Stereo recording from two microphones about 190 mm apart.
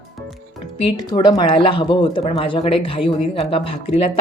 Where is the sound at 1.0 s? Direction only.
20° left (ahead or behind).